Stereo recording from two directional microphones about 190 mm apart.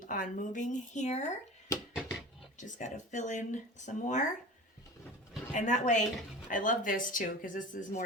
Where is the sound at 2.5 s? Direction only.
40° left (ahead or behind).